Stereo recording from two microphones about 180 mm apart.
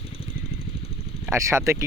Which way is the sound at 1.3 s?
15° right (ahead or behind).